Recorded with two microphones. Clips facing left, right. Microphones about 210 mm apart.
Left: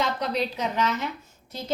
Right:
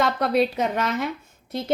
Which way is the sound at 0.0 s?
55° right (ahead or behind).